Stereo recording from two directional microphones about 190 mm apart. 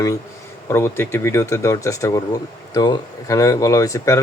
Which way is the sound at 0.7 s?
10° left (ahead or behind).